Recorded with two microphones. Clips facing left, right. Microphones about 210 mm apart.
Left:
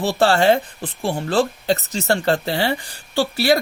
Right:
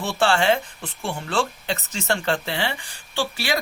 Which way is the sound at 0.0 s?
35° left (ahead or behind).